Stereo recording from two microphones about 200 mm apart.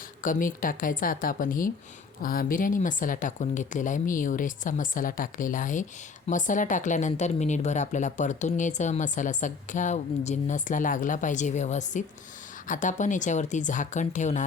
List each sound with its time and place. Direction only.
0.2 s speech: 40° left (ahead or behind)